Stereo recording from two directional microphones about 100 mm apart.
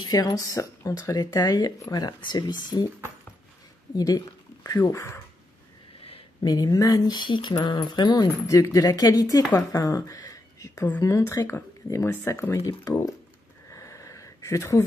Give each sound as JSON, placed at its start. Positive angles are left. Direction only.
{"t": 0.1, "sound": "speech", "side_deg": 40}
{"t": 3.9, "sound": "speech", "side_deg": 40}
{"t": 4.9, "sound": "speech", "side_deg": 25}
{"t": 6.4, "sound": "speech", "side_deg": 40}
{"t": 8.5, "sound": "speech", "side_deg": 35}
{"t": 9.4, "sound": "speech", "side_deg": 25}
{"t": 9.8, "sound": "speech", "side_deg": 40}
{"t": 13.7, "sound": "a sound", "side_deg": 30}